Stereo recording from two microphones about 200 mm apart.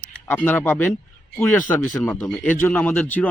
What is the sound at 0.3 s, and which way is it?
Speech, 10° left (ahead or behind).